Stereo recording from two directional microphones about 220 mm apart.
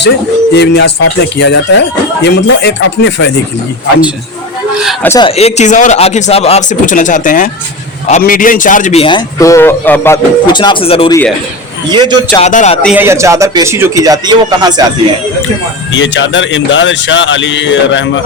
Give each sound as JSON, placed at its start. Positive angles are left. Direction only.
{"t": 0.5, "sound": "speech", "side_deg": 50}
{"t": 5.0, "sound": "speech", "side_deg": 15}
{"t": 5.4, "sound": "a man's voice", "side_deg": 30}
{"t": 11.9, "sound": "a man's voice", "side_deg": -20}
{"t": 12.4, "sound": "a man's voice", "side_deg": 30}
{"t": 12.8, "sound": "a man's voice", "side_deg": -5}
{"t": 15.9, "sound": "speech", "side_deg": 55}